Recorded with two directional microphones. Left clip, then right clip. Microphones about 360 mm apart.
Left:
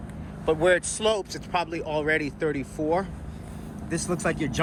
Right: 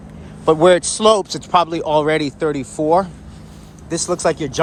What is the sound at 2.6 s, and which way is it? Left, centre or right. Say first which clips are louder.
Speech: right 11 dB; centre.